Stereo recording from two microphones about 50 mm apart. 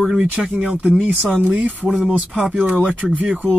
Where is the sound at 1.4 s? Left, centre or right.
Right.